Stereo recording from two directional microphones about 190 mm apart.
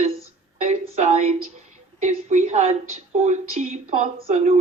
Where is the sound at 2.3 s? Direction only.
40° right (ahead or behind).